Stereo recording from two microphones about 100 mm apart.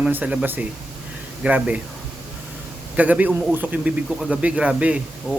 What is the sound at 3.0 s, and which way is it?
Speech, 15° right (ahead or behind).